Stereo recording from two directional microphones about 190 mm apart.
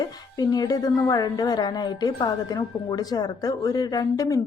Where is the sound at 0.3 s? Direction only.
20° left (ahead or behind).